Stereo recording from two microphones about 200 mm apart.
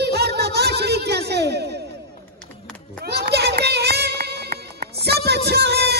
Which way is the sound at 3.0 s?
55° right (ahead or behind).